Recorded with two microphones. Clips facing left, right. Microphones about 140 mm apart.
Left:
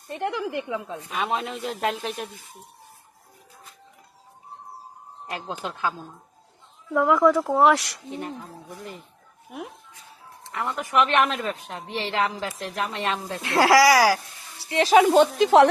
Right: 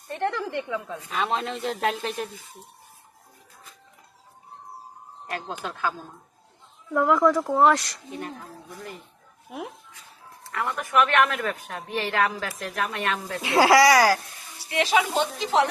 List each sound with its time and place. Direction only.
0.2 s a woman's voice: 5° left (ahead or behind)
0.7 s a woman's voice: 20° left (ahead or behind)
1.2 s a man's voice: 10° left (ahead or behind)
6.9 s a man's voice: centre (ahead or behind)
8.2 s a woman's voice: 25° left (ahead or behind)
9.5 s a man's voice: centre (ahead or behind)
10.4 s a woman's voice: 20° left (ahead or behind)
13.4 s a man's voice: centre (ahead or behind)
14.6 s speech: 30° left (ahead or behind); by 15.3 s 50° left (ahead or behind)
15.4 s speech: 60° left (ahead or behind)